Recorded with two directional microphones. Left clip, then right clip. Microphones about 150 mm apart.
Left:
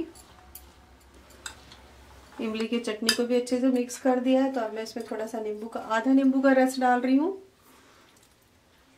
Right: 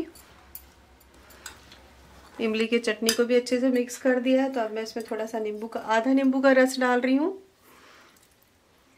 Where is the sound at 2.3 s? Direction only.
25° right (ahead or behind).